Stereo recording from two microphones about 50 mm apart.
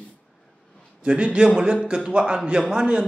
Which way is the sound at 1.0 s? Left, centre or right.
Centre.